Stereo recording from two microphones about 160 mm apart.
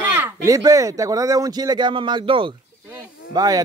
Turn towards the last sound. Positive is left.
turn(degrees=-20)  # may be behind; listen again after turning